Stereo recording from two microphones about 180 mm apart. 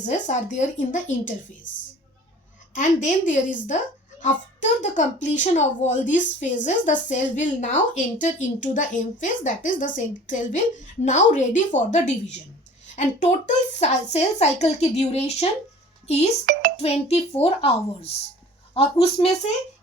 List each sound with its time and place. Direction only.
0.0 s speech: 45° left (ahead or behind)
2.7 s speech: 45° left (ahead or behind)
13.4 s speech: 40° left (ahead or behind)
16.5 s music: 55° right (ahead or behind)
16.7 s speech: 35° left (ahead or behind)